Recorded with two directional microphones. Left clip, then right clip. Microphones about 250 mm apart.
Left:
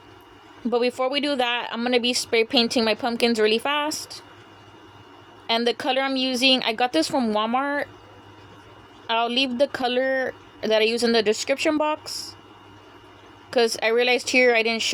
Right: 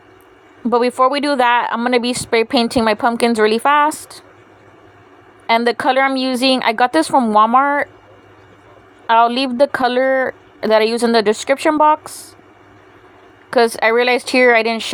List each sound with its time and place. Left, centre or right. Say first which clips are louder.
0.7 s speech: right 9 dB; centre
5.6 s speech: right 8 dB; centre
9.0 s speech: right 10 dB; centre
13.5 s speech: right 7 dB; centre